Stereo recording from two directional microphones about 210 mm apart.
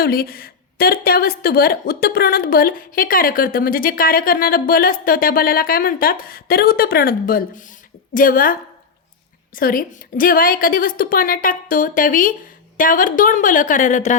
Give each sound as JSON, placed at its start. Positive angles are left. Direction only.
{"t": 0.0, "sound": "a woman's voice", "side_deg": 45}
{"t": 9.6, "sound": "a woman's voice", "side_deg": 45}